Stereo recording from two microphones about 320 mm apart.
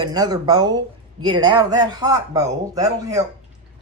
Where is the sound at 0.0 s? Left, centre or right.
Centre.